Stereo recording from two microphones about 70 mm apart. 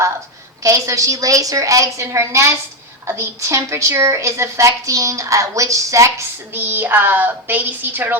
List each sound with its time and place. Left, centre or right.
0.6 s a woman's voice: right
6.5 s a woman's voice: right